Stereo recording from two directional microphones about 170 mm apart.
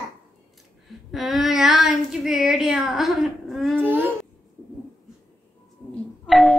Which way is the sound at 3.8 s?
10° right (ahead or behind).